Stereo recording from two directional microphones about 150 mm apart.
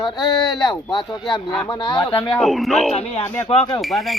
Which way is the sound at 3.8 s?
Centre (ahead or behind).